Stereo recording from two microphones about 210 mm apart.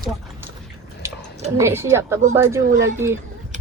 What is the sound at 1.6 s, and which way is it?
A woman's voice, 10° right (ahead or behind).